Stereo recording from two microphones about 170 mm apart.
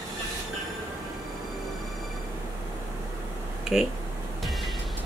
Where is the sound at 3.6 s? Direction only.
Centre (ahead or behind).